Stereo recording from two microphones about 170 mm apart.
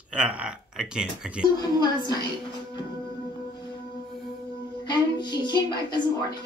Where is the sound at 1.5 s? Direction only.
25° left (ahead or behind).